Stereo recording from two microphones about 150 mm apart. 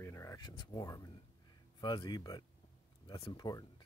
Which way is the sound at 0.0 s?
20° left (ahead or behind).